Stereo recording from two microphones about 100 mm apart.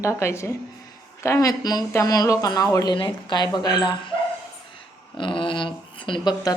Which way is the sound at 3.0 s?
50° left (ahead or behind).